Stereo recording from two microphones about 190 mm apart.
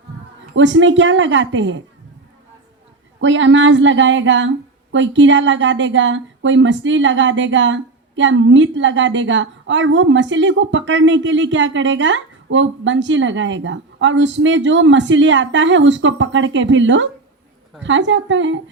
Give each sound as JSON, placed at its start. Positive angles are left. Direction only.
{"t": 0.5, "sound": "speech", "side_deg": -75}
{"t": 3.2, "sound": "a woman's voice", "side_deg": -75}